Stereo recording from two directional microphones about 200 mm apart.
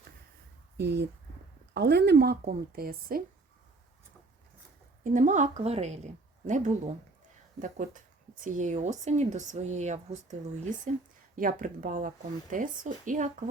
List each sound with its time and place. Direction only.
0.8 s speech: 55° right (ahead or behind)
5.0 s speech: 40° right (ahead or behind)